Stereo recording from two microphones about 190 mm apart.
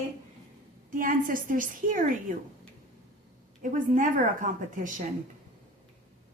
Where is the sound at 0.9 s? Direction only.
45° right (ahead or behind).